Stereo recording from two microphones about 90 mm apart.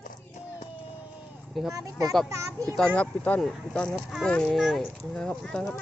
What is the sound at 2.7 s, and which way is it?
Speech, 10° left (ahead or behind).